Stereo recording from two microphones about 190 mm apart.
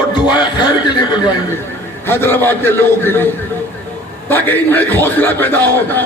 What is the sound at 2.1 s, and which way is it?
A man's voice, 10° left (ahead or behind).